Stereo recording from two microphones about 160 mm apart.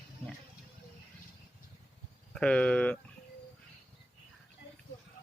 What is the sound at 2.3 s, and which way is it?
Speech, 5° left (ahead or behind).